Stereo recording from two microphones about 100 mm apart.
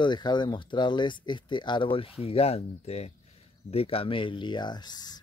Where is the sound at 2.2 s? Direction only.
80° left.